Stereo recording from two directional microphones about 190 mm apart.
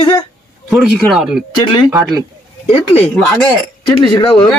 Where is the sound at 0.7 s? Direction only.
Centre (ahead or behind).